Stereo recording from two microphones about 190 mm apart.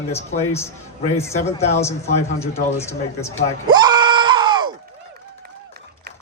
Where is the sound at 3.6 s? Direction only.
25° right (ahead or behind).